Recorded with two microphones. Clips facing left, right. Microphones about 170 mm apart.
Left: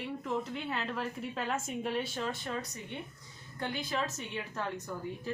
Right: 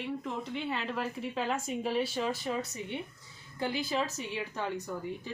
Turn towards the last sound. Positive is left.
turn(degrees=0)  # may be behind; listen again after turning